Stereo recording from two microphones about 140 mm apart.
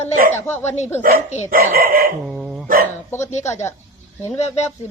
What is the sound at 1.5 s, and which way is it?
Speech, 85° right.